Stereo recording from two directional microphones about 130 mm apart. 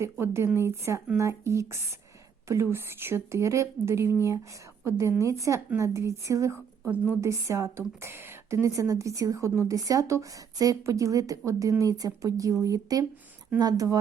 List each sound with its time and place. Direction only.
0.0 s a woman's voice: 20° right (ahead or behind)